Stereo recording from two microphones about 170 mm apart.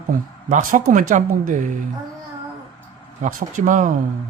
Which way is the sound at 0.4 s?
55° right (ahead or behind).